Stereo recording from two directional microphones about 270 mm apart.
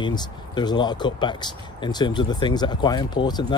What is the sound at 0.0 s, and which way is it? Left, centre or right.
Speech, centre.